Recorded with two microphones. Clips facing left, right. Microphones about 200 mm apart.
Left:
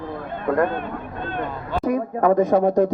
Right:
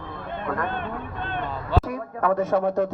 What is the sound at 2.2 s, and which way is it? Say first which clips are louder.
Speech: left 5 dB; 15° left (ahead or behind).